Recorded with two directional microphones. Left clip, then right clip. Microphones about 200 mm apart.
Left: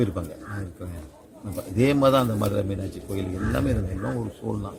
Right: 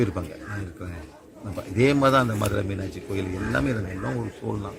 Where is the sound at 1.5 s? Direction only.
15° left (ahead or behind).